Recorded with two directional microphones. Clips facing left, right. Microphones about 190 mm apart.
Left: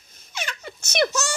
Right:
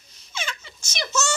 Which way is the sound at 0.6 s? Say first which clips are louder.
Left 11 dB; 60° left (ahead or behind).